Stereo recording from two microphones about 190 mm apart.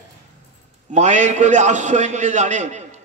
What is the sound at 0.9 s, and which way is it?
A man's voice, 40° right (ahead or behind).